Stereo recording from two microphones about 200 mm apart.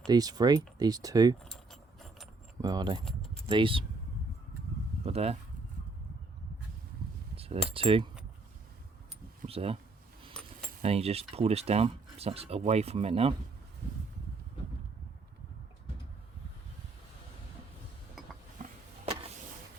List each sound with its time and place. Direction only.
0.1 s speech: 20° right (ahead or behind)
1.5 s keys jangling: centre (ahead or behind)
2.6 s speech: 20° right (ahead or behind)
3.0 s keys jangling: centre (ahead or behind)
3.4 s speech: 25° right (ahead or behind)
5.0 s speech: 30° right (ahead or behind)
7.3 s cutlery: 30° right (ahead or behind)
7.7 s speech: 25° right (ahead or behind)
9.5 s speech: 30° right (ahead or behind)
10.8 s speech: 30° right (ahead or behind)
18.6 s a sound: 40° right (ahead or behind)